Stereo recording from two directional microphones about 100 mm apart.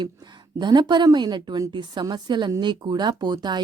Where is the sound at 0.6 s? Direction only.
50° right (ahead or behind).